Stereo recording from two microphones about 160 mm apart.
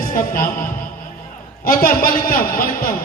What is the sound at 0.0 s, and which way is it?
Speech, 60° left (ahead or behind).